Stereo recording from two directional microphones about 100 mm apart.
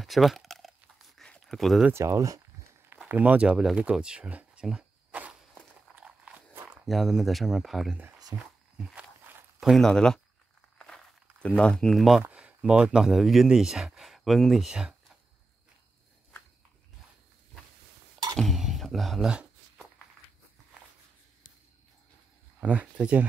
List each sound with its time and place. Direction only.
0.0 s a sound: centre (ahead or behind)
1.9 s speech: 30° right (ahead or behind)
3.1 s a sound: 15° right (ahead or behind)
6.9 s speech: 5° right (ahead or behind)
8.3 s speech: 40° right (ahead or behind)
9.6 s speech: centre (ahead or behind)
11.4 s speech: 10° left (ahead or behind)
12.2 s speech: 15° right (ahead or behind)
18.3 s speech: centre (ahead or behind)
22.6 s speech: 15° right (ahead or behind)